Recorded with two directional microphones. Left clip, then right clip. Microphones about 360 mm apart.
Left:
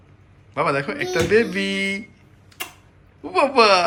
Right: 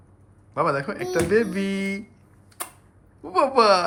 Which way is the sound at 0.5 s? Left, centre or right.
Centre.